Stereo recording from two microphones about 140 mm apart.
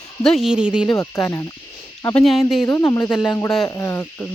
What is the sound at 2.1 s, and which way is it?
Speech, centre (ahead or behind).